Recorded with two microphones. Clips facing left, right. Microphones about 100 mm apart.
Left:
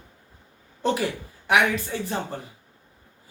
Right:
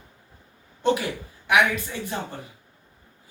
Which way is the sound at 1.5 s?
35° left (ahead or behind).